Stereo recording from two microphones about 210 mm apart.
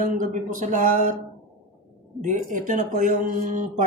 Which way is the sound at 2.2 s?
40° right (ahead or behind).